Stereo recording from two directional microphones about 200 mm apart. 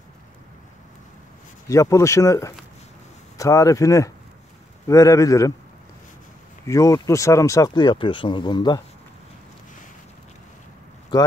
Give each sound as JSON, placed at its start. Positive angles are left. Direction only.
{"t": 1.7, "sound": "speech", "side_deg": 15}
{"t": 6.6, "sound": "speech", "side_deg": 15}